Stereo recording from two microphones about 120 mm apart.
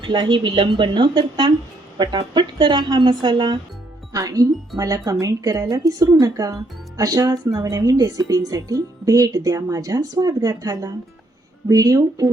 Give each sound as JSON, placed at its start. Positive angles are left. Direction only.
{"t": 0.0, "sound": "a woman's voice", "side_deg": -40}